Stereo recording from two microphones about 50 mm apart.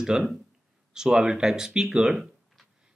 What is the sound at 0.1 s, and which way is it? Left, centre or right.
Speech, centre.